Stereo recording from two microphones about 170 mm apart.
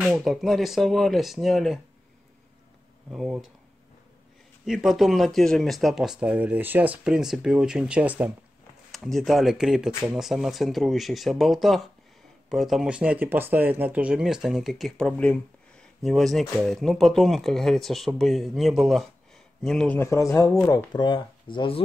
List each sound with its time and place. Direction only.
0.0 s speech: centre (ahead or behind)
3.1 s speech: 5° right (ahead or behind)
4.6 s a man's voice: centre (ahead or behind); by 21.8 s 30° left (ahead or behind)